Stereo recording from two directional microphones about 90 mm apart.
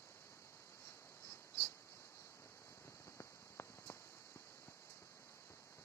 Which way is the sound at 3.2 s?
30° left (ahead or behind).